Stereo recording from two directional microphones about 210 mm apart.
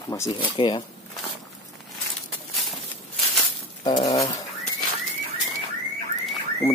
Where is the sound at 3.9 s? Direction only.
20° left (ahead or behind).